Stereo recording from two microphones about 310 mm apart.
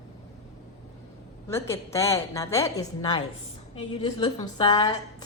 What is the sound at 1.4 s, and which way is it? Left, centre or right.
A woman's voice, centre.